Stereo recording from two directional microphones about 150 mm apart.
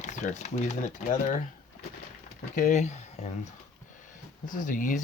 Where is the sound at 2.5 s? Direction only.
55° left (ahead or behind).